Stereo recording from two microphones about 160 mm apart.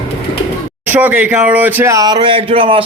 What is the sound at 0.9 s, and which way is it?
A man's voice, 10° right (ahead or behind).